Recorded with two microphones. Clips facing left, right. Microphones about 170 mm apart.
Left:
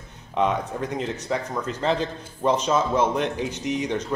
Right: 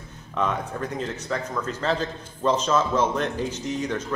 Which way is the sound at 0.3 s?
20° left (ahead or behind).